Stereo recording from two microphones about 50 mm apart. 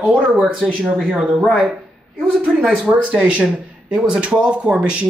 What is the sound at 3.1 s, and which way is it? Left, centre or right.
Speech, right.